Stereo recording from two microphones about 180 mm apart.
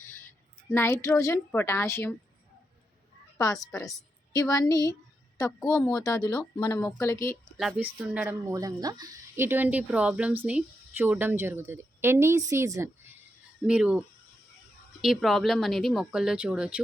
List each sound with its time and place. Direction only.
0.7 s a woman's voice: 15° left (ahead or behind)
3.3 s a woman's voice: 15° left (ahead or behind)
7.5 s speech: centre (ahead or behind)
15.0 s speech: centre (ahead or behind)